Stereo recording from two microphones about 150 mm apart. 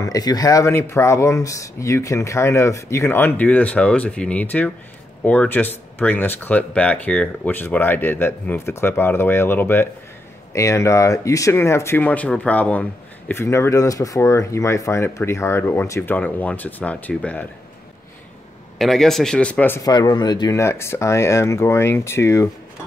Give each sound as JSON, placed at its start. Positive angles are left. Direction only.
{"t": 0.0, "sound": "speech", "side_deg": 25}
{"t": 18.8, "sound": "a man's voice", "side_deg": 0}
{"t": 19.8, "sound": "speech", "side_deg": 25}